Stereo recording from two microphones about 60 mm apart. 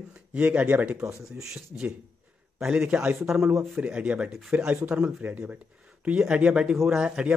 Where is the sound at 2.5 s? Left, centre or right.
Centre.